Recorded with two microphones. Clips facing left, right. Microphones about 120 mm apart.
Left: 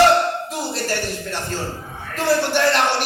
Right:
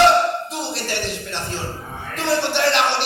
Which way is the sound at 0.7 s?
45° left (ahead or behind).